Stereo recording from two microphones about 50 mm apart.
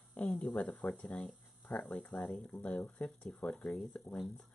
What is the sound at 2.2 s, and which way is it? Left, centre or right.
Speech, centre.